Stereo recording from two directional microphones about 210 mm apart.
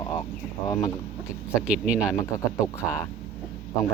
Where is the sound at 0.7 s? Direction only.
15° left (ahead or behind).